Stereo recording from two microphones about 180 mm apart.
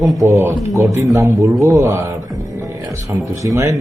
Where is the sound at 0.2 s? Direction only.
15° right (ahead or behind).